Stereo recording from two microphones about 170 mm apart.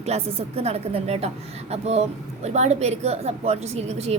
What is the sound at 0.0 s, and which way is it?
A woman's voice, 40° right (ahead or behind).